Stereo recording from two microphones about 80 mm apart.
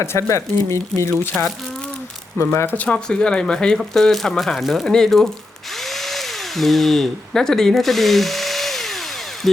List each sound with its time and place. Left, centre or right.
0.0 s speech: left
2.7 s speech: centre
5.8 s drill: centre